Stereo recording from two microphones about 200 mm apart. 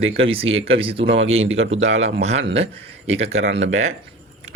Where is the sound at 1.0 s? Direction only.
70° right (ahead or behind).